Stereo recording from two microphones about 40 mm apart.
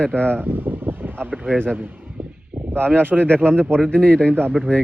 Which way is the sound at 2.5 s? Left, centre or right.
Right.